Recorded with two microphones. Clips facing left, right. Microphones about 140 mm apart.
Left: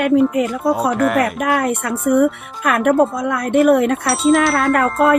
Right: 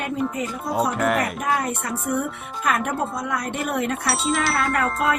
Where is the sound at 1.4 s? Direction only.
70° left (ahead or behind).